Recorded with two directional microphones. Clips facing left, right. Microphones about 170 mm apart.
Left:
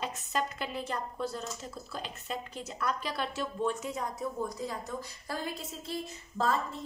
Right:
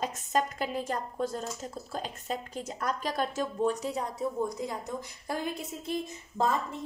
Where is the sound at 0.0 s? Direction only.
45° right (ahead or behind).